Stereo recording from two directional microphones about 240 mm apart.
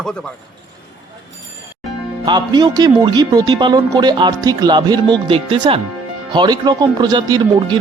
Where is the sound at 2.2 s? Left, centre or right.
Centre.